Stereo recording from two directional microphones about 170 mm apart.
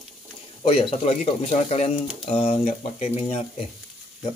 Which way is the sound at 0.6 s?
40° left (ahead or behind).